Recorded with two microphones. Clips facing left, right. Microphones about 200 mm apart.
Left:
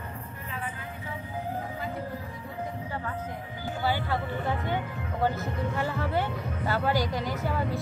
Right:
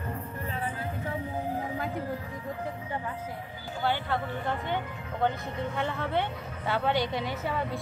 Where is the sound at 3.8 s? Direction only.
5° left (ahead or behind).